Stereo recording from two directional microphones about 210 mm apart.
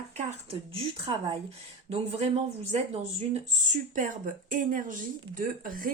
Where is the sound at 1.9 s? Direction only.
30° right (ahead or behind).